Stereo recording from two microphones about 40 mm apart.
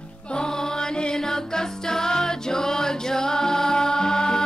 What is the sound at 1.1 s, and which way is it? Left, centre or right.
Music, centre.